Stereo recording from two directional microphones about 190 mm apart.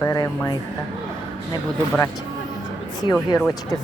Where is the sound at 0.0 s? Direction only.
15° left (ahead or behind).